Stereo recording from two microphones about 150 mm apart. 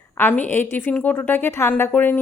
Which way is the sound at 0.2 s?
10° left (ahead or behind).